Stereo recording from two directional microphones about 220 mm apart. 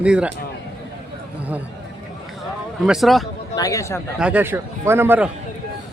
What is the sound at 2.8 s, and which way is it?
Speech, centre (ahead or behind).